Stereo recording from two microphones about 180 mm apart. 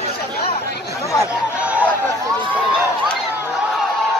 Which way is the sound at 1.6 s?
5° right (ahead or behind).